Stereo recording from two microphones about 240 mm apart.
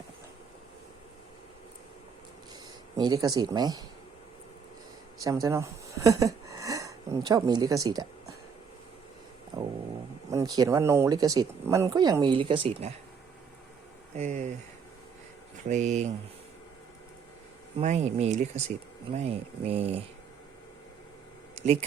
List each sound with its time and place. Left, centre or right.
3.0 s speech: centre
5.2 s speech: centre
9.5 s a sound: centre
10.2 s speech: centre
14.2 s speech: right
15.7 s speech: right
17.7 s speech: right
21.5 s a sound: right